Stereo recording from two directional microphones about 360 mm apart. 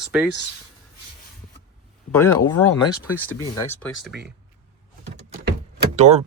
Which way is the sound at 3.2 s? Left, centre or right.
Centre.